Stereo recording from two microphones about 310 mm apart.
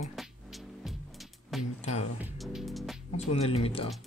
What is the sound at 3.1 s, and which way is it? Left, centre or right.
Speech, centre.